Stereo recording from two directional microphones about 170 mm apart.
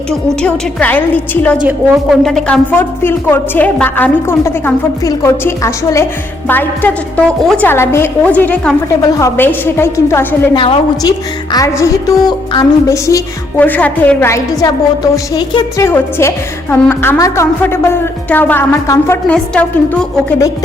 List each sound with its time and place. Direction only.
0.1 s a woman's voice: 5° left (ahead or behind)
2.7 s a woman's voice: 15° left (ahead or behind)
10.5 s a woman's voice: 30° left (ahead or behind); by 20.1 s 5° left (ahead or behind)